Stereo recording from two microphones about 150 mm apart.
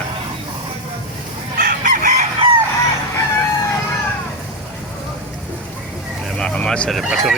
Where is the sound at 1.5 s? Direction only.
60° right (ahead or behind).